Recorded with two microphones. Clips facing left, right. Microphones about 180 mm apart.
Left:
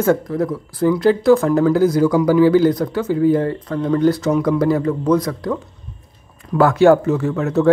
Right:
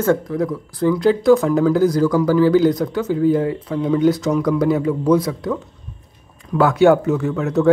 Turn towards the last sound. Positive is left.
turn(degrees=0)  # may be behind; listen again after turning